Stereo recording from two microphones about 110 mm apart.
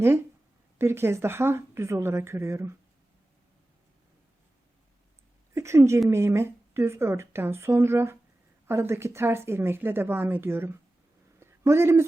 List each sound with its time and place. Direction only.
0.8 s speech: 25° right (ahead or behind)
5.5 s speech: 25° right (ahead or behind)
11.3 s a sound: 25° right (ahead or behind)